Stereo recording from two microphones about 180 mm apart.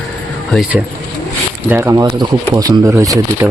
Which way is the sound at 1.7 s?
15° right (ahead or behind).